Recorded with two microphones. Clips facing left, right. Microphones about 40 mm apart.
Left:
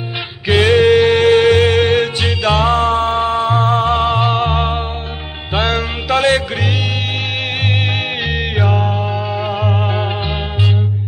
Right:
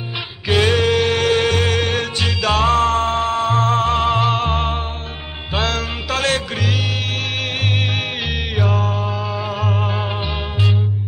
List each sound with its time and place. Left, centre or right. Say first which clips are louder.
0.5 s music: left 6 dB; left
8.7 s music: left 3 dB; centre